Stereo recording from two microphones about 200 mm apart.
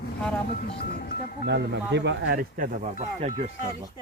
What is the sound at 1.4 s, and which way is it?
Speech, 60° right (ahead or behind).